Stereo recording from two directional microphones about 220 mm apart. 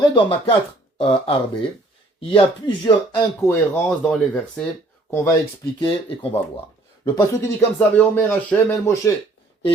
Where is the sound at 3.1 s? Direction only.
10° left (ahead or behind).